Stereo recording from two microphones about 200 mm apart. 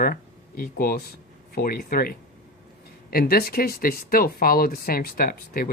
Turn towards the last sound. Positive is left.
turn(degrees=45)  # may be behind; listen again after turning